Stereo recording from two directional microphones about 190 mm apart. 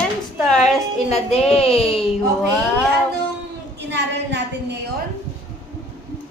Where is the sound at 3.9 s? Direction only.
65° right (ahead or behind).